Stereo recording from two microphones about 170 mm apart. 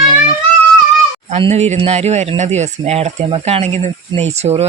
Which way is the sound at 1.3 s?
40° right (ahead or behind).